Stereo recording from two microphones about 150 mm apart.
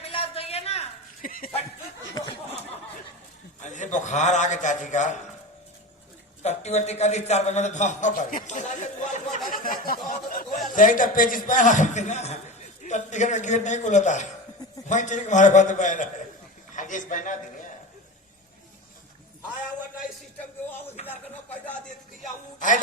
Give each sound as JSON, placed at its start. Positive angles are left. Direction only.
{"t": 0.0, "sound": "a sound", "side_deg": 40}
{"t": 1.2, "sound": "dog", "side_deg": 70}
{"t": 3.6, "sound": "a man's voice", "side_deg": 55}
{"t": 6.4, "sound": "a man's voice", "side_deg": 45}
{"t": 9.5, "sound": "a sound", "side_deg": 70}
{"t": 10.8, "sound": "a man's voice", "side_deg": 60}
{"t": 21.0, "sound": "a man's voice", "side_deg": 50}